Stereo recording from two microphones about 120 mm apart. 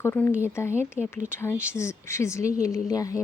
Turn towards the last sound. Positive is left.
turn(degrees=30)  # may be behind; listen again after turning